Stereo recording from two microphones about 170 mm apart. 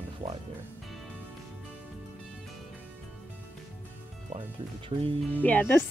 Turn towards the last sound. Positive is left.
turn(degrees=10)  # may be behind; listen again after turning